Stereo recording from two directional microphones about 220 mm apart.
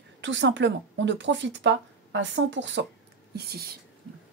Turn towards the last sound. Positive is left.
turn(degrees=-45)  # may be behind; listen again after turning